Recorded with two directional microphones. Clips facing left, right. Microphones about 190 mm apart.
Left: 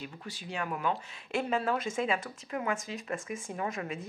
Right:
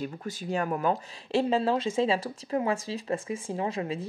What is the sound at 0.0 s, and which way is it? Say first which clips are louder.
Speech: right 8 dB; 45° right (ahead or behind).